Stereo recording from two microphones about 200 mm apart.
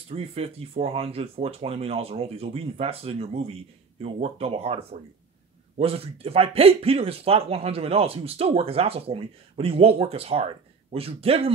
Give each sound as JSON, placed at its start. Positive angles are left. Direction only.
{"t": 0.1, "sound": "speech", "side_deg": -30}